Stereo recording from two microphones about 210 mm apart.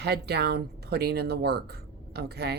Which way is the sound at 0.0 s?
50° right (ahead or behind).